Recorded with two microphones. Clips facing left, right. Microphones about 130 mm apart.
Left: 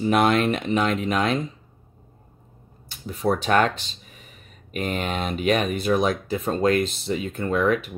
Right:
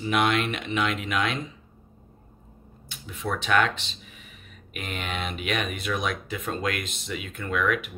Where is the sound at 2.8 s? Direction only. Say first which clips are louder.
Left 8 dB; 40° left (ahead or behind).